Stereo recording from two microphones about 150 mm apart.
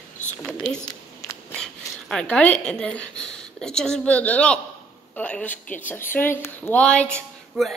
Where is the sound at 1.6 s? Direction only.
5° left (ahead or behind).